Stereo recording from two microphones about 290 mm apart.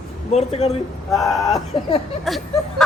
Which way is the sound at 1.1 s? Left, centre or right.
Centre.